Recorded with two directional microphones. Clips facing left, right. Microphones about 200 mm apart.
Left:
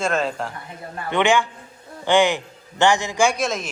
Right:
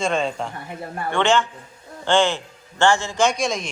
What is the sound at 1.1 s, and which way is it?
A man's voice, 15° left (ahead or behind).